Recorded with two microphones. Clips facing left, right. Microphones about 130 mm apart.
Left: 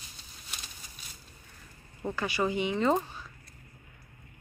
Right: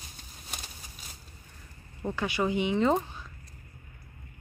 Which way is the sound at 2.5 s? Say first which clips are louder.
Right 2 dB; 15° right (ahead or behind).